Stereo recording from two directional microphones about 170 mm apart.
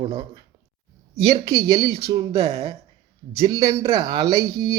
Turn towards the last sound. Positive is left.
turn(degrees=-20)  # may be behind; listen again after turning